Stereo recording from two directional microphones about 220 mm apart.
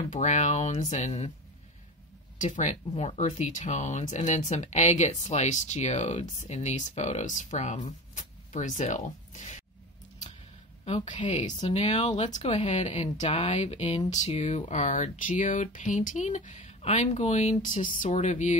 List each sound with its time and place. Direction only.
0.1 s speech: 35° left (ahead or behind)
2.3 s speech: 35° left (ahead or behind)
8.1 s zipper: 35° left (ahead or behind)
10.9 s speech: 25° left (ahead or behind)